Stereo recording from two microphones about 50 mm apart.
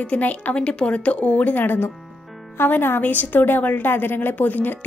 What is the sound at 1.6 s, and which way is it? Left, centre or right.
A woman's voice, left.